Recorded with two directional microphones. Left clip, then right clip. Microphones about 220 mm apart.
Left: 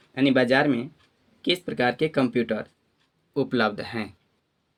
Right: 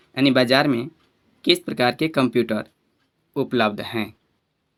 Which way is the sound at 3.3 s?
25° right (ahead or behind).